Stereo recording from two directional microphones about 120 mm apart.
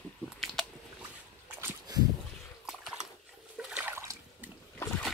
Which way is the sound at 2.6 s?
5° right (ahead or behind).